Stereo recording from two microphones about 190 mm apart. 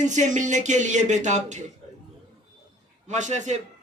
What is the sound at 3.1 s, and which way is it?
Speech, 40° right (ahead or behind).